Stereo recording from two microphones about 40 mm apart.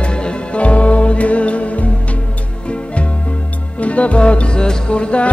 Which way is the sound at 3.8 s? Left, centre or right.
Left.